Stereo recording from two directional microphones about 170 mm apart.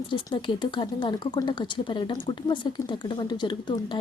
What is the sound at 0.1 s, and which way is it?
Speech, 30° left (ahead or behind).